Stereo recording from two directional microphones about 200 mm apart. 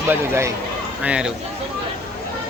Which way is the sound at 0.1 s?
15° right (ahead or behind).